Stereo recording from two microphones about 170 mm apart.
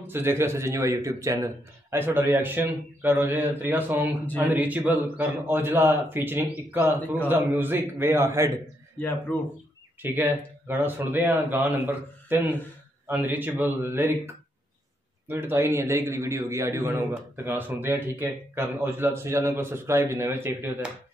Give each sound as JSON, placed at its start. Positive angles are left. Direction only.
{"t": 0.0, "sound": "a man's voice", "side_deg": -15}
{"t": 9.3, "sound": "speech", "side_deg": 10}
{"t": 10.0, "sound": "a man's voice", "side_deg": -10}